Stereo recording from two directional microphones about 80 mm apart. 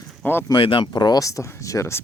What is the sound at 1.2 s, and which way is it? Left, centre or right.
Speech, left.